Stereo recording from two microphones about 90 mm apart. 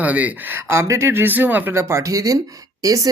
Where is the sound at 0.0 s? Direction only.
15° right (ahead or behind).